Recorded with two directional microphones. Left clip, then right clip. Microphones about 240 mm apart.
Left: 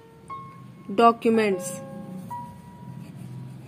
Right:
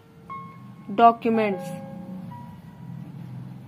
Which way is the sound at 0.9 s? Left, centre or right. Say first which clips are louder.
Right 1 dB; left.